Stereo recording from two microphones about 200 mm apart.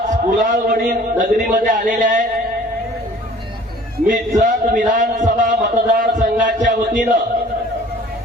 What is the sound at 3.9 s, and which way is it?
A man's voice, 40° right (ahead or behind).